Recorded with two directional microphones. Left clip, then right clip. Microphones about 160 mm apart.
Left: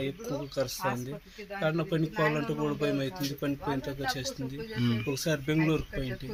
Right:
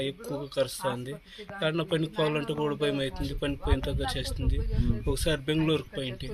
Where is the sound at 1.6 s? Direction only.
30° right (ahead or behind).